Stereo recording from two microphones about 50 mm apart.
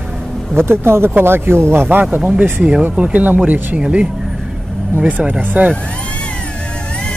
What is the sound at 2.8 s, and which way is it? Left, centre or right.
Speech, right.